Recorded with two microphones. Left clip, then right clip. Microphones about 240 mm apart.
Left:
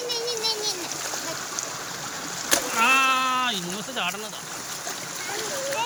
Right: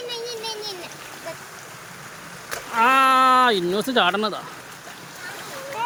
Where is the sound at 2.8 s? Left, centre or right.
Centre.